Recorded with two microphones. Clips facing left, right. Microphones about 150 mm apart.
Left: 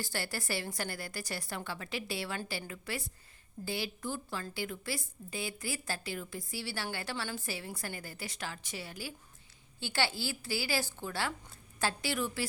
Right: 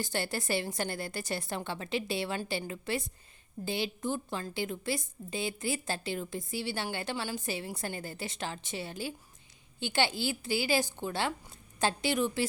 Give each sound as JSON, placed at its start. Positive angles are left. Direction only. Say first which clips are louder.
{"t": 0.0, "sound": "a woman's voice", "louder": "right 4 dB", "side_deg": -20}